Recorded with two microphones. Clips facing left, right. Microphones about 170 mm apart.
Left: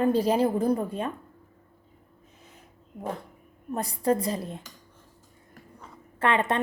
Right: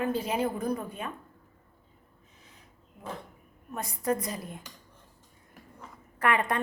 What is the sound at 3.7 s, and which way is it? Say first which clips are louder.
Speech: left 5 dB; 35° left (ahead or behind).